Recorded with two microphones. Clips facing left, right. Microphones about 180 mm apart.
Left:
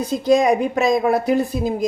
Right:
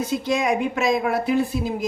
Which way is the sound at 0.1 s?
35° left (ahead or behind).